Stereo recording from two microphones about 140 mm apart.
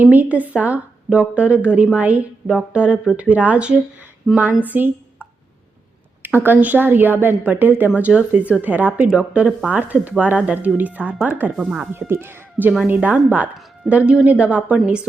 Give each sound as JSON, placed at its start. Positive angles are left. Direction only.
{"t": 0.0, "sound": "a woman's voice", "side_deg": -10}
{"t": 4.6, "sound": "a sound", "side_deg": -10}
{"t": 6.2, "sound": "a woman's voice", "side_deg": -15}
{"t": 11.9, "sound": "a woman's voice", "side_deg": -15}